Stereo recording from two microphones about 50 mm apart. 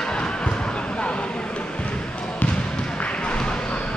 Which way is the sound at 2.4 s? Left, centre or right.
Left.